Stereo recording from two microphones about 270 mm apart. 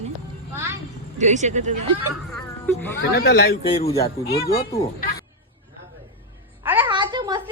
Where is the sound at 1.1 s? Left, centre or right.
Right.